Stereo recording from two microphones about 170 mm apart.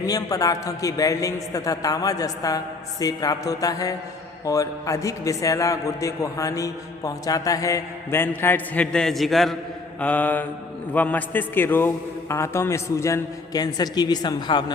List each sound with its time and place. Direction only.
0.0 s a man's voice: 20° left (ahead or behind)